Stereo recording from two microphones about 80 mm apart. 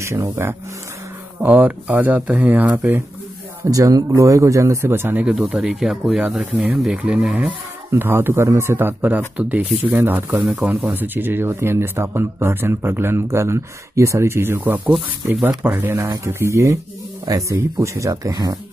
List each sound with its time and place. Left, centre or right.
0.0 s speech: right
1.4 s speech: right
3.7 s speech: right
5.2 s speech: centre
7.9 s speech: right
18.1 s speech: right